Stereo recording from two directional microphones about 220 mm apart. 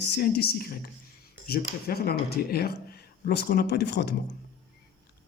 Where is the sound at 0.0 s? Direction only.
50° left (ahead or behind).